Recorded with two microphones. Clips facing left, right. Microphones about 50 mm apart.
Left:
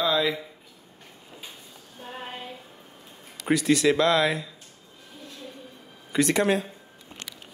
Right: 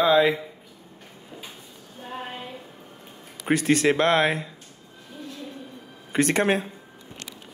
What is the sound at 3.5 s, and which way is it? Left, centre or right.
Speech, right.